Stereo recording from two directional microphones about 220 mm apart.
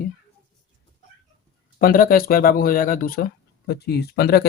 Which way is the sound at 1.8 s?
40° left (ahead or behind).